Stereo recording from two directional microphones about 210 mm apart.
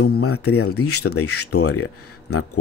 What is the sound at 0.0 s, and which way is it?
Speech, 90° left.